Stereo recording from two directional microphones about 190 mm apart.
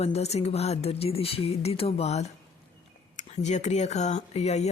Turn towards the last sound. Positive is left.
turn(degrees=35)  # may be behind; listen again after turning